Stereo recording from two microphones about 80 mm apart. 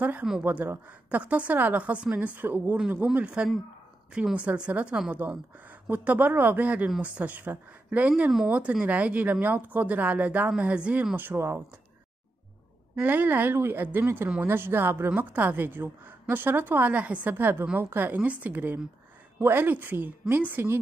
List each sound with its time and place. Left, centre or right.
0.0 s a woman's voice: centre
3.1 s a woman's voice: centre
11.1 s a woman's voice: right
13.0 s a woman's voice: right